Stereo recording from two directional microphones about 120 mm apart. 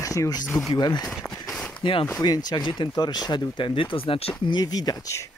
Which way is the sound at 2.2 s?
35° left (ahead or behind).